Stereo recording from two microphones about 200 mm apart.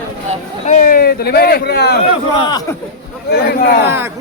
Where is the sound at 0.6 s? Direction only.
40° left (ahead or behind); by 2.0 s 55° left (ahead or behind).